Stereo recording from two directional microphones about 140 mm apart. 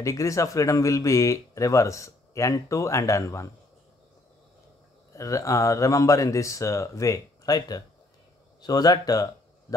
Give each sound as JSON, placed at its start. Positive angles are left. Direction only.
{"t": 0.0, "sound": "speech", "side_deg": 20}
{"t": 5.1, "sound": "speech", "side_deg": 20}